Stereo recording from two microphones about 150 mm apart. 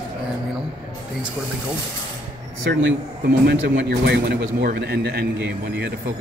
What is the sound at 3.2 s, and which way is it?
Speech, 90° right.